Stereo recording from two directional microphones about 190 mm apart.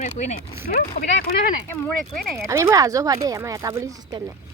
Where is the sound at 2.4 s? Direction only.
15° right (ahead or behind).